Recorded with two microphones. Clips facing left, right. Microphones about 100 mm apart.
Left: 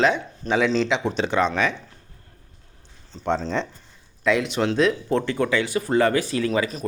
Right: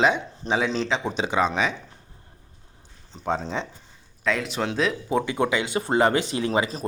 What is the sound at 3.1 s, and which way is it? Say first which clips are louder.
Speech: left 3 dB; 15° right (ahead or behind).